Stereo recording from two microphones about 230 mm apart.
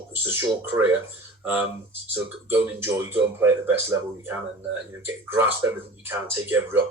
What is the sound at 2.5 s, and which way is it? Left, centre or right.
Speech, centre.